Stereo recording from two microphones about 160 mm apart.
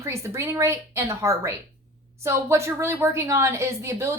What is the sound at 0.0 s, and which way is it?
A woman's voice, 15° right (ahead or behind).